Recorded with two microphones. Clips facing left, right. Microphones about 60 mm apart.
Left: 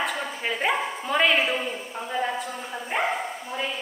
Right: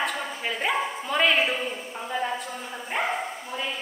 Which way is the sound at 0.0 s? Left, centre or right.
Centre.